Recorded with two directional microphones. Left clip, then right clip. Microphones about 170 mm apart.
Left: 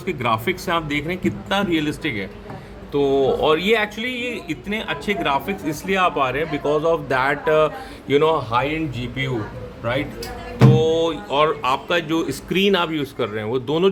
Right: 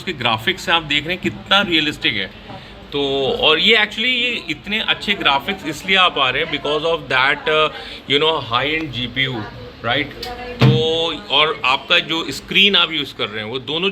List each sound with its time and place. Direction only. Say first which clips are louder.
0.0 s speech: right 2 dB; 20° left (ahead or behind); by 10.1 s centre (ahead or behind)
10.6 s speech: even; 20° left (ahead or behind); by 13.8 s 40° left (ahead or behind)